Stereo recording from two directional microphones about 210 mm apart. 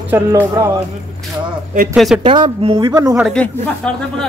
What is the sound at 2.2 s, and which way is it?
Speech, 25° right (ahead or behind).